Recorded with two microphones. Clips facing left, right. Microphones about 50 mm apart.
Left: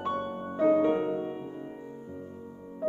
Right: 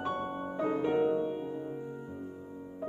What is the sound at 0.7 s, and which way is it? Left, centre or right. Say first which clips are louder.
Music: left 4 dB; left.